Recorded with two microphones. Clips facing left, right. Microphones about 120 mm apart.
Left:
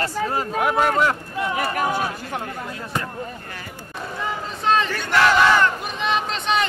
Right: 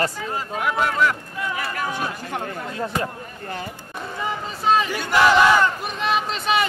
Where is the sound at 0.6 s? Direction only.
45° left (ahead or behind).